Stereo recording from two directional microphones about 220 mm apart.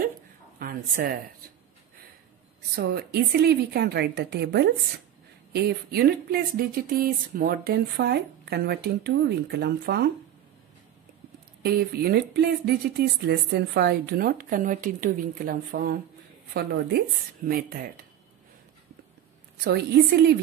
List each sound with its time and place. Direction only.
0.6 s a woman's voice: 40° right (ahead or behind)
2.7 s speech: 45° right (ahead or behind)
11.6 s speech: 45° right (ahead or behind)
19.6 s speech: 45° right (ahead or behind)